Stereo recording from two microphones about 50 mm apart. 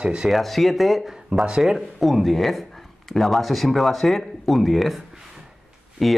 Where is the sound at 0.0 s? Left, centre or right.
Centre.